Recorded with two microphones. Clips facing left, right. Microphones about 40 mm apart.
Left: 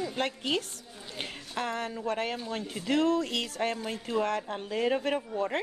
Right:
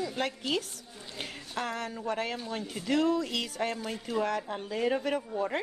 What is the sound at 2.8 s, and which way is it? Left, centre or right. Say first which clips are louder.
Speech: left 1 dB; left.